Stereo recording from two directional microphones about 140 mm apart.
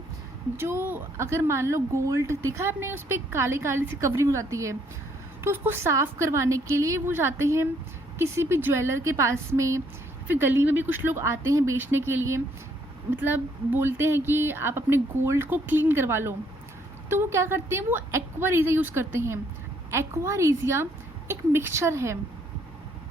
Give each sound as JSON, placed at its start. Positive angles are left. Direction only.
{"t": 0.5, "sound": "speech", "side_deg": -15}